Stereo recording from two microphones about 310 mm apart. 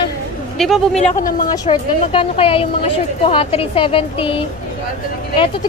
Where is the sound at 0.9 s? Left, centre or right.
Left.